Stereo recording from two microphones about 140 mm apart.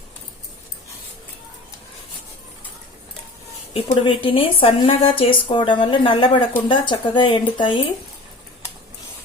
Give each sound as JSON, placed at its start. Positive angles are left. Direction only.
{"t": 3.8, "sound": "speech", "side_deg": 35}